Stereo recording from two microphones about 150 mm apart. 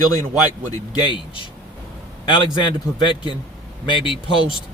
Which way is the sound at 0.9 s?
30° left (ahead or behind).